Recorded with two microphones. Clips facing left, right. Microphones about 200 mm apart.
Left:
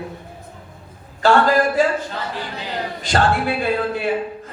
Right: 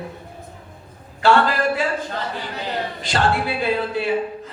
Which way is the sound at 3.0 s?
50° left (ahead or behind).